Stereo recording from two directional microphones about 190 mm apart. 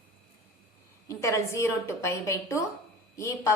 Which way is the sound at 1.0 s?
15° left (ahead or behind).